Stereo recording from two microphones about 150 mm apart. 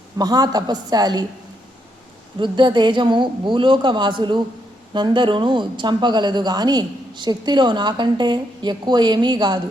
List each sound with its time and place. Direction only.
0.2 s speech: 25° right (ahead or behind)
2.4 s a woman's voice: 30° right (ahead or behind)